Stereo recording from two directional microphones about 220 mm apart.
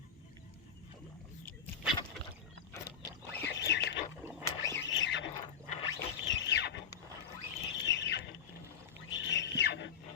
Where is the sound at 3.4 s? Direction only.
50° left (ahead or behind).